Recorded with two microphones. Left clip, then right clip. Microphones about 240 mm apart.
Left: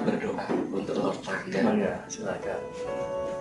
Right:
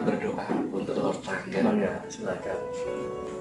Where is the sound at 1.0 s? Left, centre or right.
Centre.